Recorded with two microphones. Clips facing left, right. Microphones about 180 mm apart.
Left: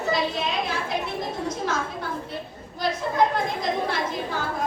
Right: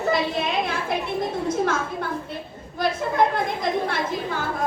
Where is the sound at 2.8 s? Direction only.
55° right (ahead or behind).